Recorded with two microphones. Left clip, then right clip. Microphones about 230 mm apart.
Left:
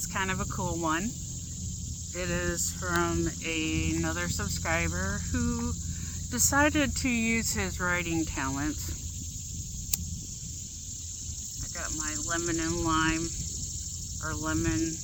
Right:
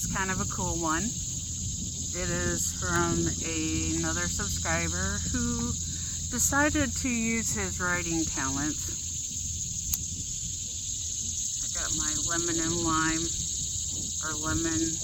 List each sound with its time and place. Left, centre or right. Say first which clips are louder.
0.1 s cricket: left 1 dB; centre
2.2 s speech: even; centre
11.8 s speech: right 2 dB; centre
14.3 s speech: left 1 dB; centre